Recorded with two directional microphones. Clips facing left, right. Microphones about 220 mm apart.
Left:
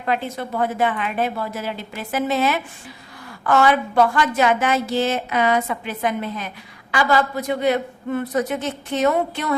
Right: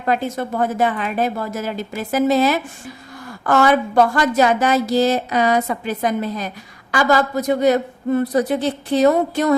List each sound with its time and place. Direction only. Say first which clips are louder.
0.0 s a woman's voice: right 4 dB; 40° right (ahead or behind)